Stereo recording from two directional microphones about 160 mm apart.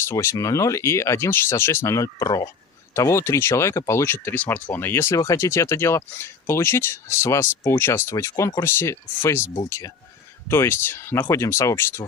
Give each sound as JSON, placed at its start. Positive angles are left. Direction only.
{"t": 0.0, "sound": "speech", "side_deg": 20}